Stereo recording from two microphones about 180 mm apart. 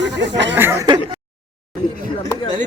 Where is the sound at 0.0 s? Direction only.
80° right.